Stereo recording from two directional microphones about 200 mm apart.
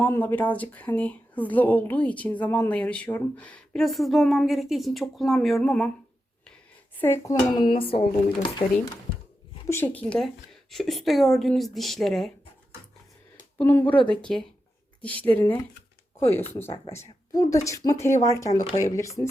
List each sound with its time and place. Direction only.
0.0 s speech: 10° left (ahead or behind)
7.0 s speech: 10° left (ahead or behind)
9.6 s a woman's voice: 10° left (ahead or behind)
13.6 s a woman's voice: 10° left (ahead or behind)